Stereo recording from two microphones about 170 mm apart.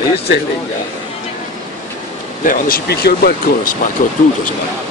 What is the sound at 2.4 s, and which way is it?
Speech, 55° left (ahead or behind).